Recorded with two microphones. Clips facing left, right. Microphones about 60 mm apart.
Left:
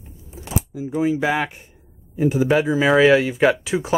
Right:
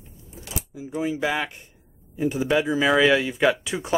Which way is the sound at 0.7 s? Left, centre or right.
Left.